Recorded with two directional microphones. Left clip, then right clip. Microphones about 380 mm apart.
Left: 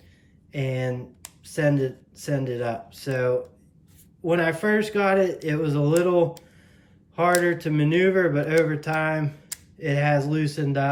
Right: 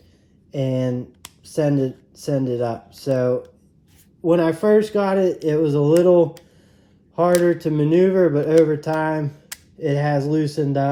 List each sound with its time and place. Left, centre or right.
0.5 s speech: centre
7.4 s speech: centre